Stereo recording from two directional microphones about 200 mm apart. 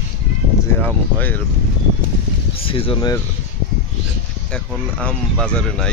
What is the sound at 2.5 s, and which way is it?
Speech, 25° left (ahead or behind).